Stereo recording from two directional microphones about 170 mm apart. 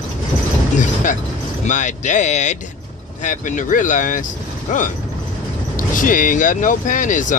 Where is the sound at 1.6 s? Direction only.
45° left (ahead or behind).